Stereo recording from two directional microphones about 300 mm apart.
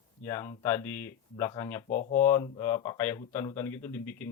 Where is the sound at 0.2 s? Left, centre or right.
Centre.